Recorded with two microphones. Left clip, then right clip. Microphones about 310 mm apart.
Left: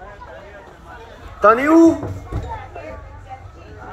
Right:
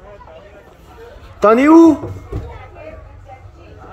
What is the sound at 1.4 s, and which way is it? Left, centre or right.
Speech, right.